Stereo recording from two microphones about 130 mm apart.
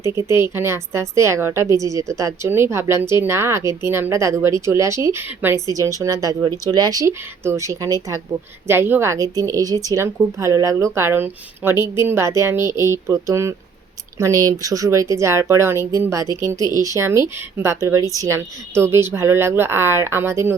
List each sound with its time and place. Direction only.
0.0 s speech: 20° right (ahead or behind)
18.0 s speech: 25° left (ahead or behind)
18.3 s speech: 20° right (ahead or behind)